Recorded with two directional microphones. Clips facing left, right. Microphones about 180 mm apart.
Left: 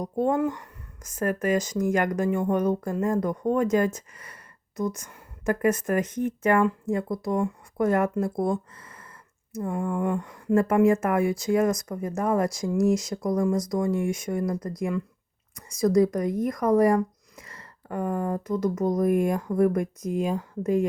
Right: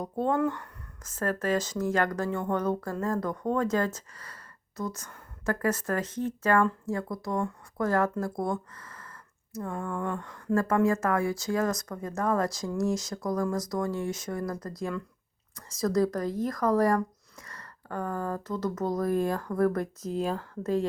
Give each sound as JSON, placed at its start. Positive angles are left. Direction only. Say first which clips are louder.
{"t": 0.0, "sound": "speech", "louder": "left 3 dB", "side_deg": 15}